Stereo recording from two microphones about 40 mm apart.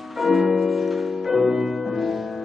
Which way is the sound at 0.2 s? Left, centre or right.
Centre.